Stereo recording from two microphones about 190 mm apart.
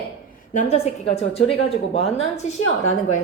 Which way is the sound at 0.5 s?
35° left (ahead or behind).